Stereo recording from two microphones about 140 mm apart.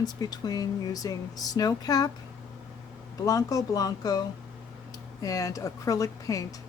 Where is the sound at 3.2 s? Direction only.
25° left (ahead or behind).